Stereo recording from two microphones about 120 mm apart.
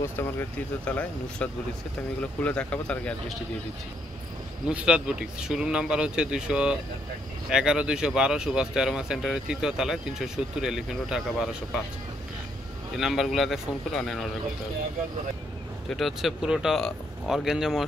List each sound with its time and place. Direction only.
0.0 s speech: 20° left (ahead or behind)
4.6 s speech: 10° right (ahead or behind)
12.9 s speech: centre (ahead or behind)
15.9 s speech: centre (ahead or behind)